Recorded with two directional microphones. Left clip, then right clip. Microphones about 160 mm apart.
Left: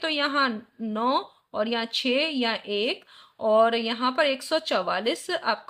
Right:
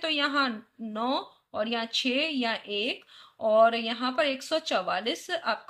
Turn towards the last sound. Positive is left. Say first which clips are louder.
# left 4 dB
turn(degrees=35)  # may be behind; listen again after turning